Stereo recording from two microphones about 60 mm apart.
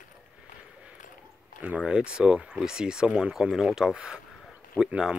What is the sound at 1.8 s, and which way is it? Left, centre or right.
Speech, centre.